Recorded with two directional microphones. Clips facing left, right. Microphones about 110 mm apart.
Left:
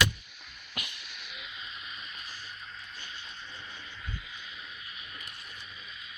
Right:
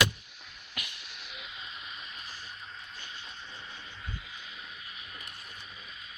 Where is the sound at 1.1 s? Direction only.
35° right (ahead or behind).